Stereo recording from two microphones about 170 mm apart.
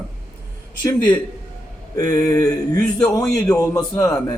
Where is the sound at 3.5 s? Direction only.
20° left (ahead or behind).